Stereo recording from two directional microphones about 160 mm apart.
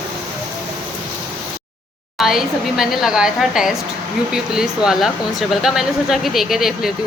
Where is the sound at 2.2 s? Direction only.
Centre (ahead or behind).